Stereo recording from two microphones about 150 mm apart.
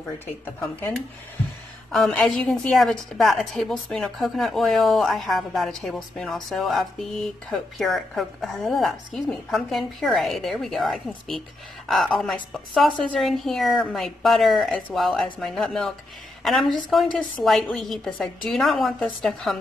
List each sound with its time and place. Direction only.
0.6 s speech: 15° left (ahead or behind)
1.9 s speech: centre (ahead or behind)